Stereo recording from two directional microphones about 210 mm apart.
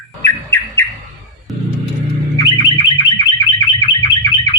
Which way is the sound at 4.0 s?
20° left (ahead or behind).